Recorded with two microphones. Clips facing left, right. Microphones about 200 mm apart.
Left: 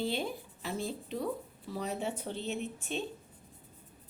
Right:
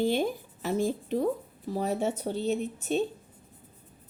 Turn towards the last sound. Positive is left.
turn(degrees=-40)  # may be behind; listen again after turning